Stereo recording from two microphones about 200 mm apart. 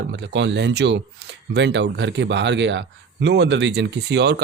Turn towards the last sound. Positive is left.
turn(degrees=-55)  # may be behind; listen again after turning